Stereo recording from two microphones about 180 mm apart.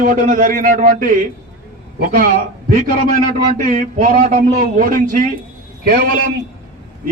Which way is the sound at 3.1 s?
45° right (ahead or behind).